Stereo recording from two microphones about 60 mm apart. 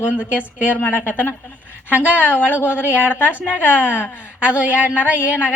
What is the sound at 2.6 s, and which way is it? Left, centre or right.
Speech, left.